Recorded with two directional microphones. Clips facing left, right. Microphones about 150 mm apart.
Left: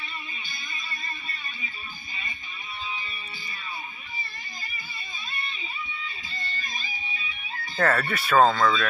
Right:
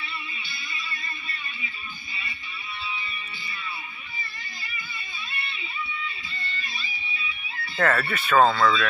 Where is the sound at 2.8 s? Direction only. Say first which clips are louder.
Even; 40° left (ahead or behind).